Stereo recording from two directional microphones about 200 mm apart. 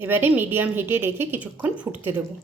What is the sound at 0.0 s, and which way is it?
A woman's voice, 10° right (ahead or behind).